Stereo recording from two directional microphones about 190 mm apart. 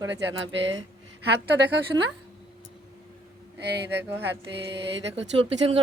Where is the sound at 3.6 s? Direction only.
60° right (ahead or behind).